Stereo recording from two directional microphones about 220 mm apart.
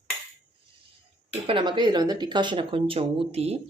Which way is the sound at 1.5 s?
20° right (ahead or behind).